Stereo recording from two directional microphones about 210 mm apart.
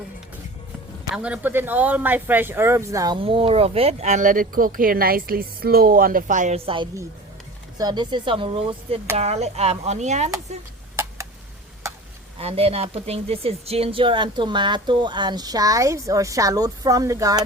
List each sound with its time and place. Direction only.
1.1 s speech: 5° right (ahead or behind); by 10.3 s 35° right (ahead or behind)
12.4 s speech: 30° right (ahead or behind)